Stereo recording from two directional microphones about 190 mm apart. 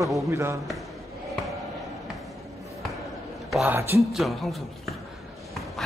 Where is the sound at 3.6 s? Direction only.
15° right (ahead or behind).